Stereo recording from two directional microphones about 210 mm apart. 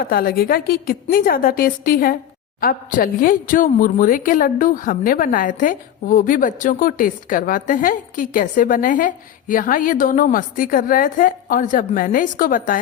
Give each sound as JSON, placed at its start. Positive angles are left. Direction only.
{"t": 0.0, "sound": "a woman's voice", "side_deg": 45}